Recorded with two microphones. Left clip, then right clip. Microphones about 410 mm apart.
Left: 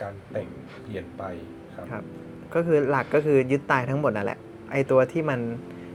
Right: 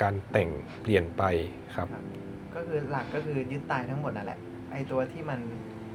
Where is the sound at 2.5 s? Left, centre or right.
Left.